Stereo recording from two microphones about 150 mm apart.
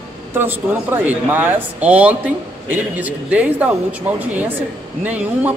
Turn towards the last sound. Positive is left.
turn(degrees=-10)  # may be behind; listen again after turning